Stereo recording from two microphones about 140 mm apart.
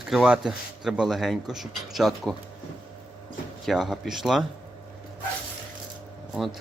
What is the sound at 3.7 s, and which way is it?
Speech, centre (ahead or behind).